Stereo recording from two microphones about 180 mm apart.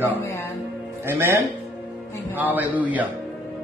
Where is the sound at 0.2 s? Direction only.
15° left (ahead or behind).